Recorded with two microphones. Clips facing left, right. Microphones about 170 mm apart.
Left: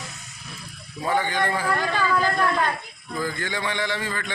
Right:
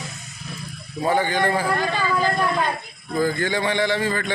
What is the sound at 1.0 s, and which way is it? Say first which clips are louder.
Speech: right 3 dB; 30° right (ahead or behind).